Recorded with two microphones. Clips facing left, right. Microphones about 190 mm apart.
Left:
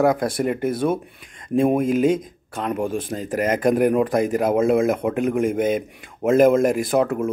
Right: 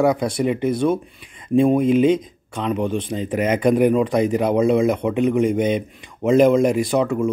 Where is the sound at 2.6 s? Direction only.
5° left (ahead or behind).